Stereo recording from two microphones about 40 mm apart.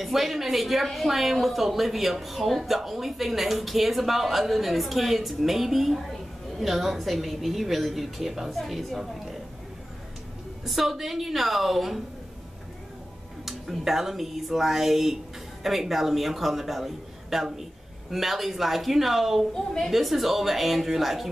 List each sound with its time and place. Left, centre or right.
0.0 s speech: centre
10.6 s speech: centre
13.5 s speech: centre
19.5 s a woman's voice: centre
19.9 s speech: centre